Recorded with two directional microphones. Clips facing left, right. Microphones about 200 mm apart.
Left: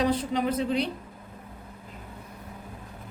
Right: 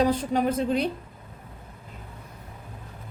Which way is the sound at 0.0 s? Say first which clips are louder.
Right 3 dB; 45° right (ahead or behind).